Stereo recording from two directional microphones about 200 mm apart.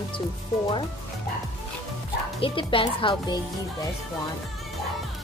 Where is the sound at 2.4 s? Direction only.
25° left (ahead or behind).